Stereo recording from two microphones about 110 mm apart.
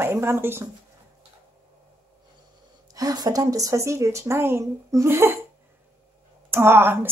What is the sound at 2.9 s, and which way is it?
Speech, 35° right (ahead or behind).